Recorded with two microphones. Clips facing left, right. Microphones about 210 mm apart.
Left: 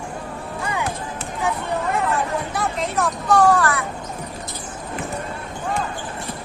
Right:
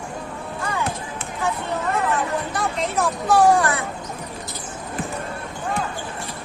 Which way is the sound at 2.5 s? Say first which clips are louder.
Even; centre (ahead or behind).